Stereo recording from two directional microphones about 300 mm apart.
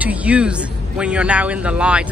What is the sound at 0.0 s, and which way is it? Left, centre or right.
Speech, centre.